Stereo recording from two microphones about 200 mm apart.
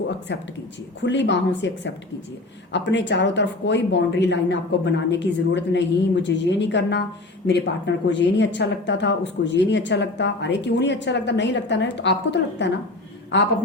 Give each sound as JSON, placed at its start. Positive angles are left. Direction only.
{"t": 0.3, "sound": "speech", "side_deg": 60}